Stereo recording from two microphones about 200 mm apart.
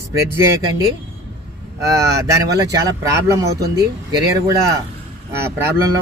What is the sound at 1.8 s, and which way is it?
Speech, 15° right (ahead or behind).